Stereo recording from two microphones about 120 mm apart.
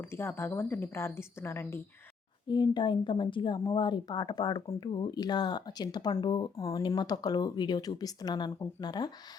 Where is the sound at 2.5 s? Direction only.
40° left (ahead or behind).